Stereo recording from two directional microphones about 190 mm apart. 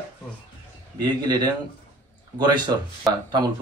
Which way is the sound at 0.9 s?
20° right (ahead or behind).